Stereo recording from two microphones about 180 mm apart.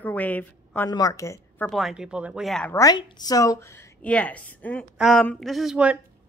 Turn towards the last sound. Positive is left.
turn(degrees=-5)  # may be behind; listen again after turning